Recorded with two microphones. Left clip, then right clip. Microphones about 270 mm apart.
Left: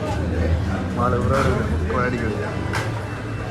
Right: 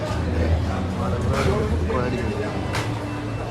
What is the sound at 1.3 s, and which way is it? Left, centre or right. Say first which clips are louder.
Speech: even; centre.